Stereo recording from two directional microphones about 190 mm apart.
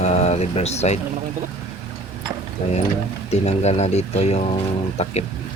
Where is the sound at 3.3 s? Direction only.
35° left (ahead or behind).